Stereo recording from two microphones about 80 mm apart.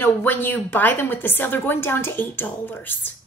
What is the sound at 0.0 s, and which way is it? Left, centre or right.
A woman's voice, left.